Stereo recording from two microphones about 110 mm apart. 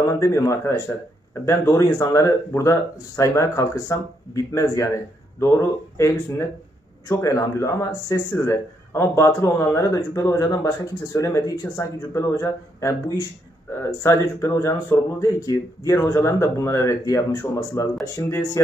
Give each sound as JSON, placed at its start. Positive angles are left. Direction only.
{"t": 0.0, "sound": "speech", "side_deg": 25}